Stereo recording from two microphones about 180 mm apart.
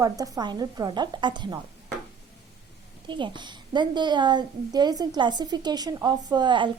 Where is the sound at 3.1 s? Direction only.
25° right (ahead or behind).